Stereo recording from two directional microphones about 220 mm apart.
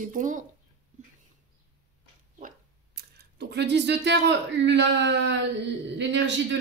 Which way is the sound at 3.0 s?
45° right (ahead or behind).